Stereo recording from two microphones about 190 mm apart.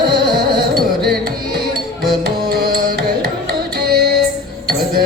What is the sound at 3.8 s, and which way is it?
Music, 55° right (ahead or behind).